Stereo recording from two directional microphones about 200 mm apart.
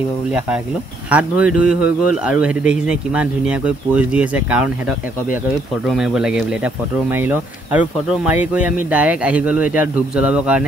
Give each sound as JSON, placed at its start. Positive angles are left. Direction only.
{"t": 1.1, "sound": "speech", "side_deg": -5}